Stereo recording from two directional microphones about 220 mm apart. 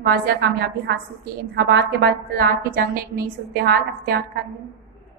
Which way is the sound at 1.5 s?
50° right (ahead or behind).